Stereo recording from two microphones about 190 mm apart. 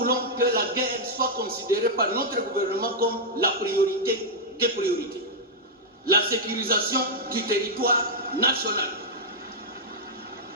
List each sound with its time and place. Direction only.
0.0 s a man's voice: 50° right (ahead or behind)
6.1 s a man's voice: 50° right (ahead or behind)